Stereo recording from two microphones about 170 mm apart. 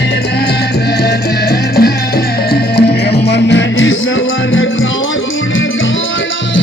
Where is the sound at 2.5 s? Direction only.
70° left (ahead or behind); by 3.9 s 90° left.